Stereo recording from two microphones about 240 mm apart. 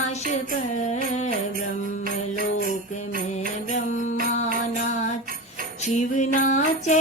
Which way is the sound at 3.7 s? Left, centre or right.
Left.